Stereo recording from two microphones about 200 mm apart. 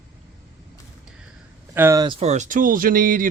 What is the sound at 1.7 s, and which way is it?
Speech, 15° right (ahead or behind).